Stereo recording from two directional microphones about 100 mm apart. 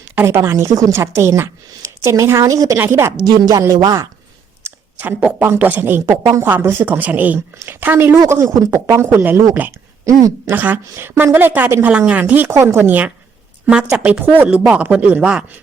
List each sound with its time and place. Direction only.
0.2 s speech: 25° right (ahead or behind)
2.7 s speech: 25° right (ahead or behind)
3.4 s speech: 35° right (ahead or behind)
4.6 s speech: 20° right (ahead or behind)
6.1 s speech: 35° right (ahead or behind)
10.1 s speech: 30° right (ahead or behind)
10.5 s a woman's voice: 15° right (ahead or behind)